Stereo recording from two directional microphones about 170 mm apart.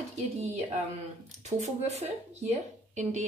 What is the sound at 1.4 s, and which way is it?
Speech, 40° right (ahead or behind).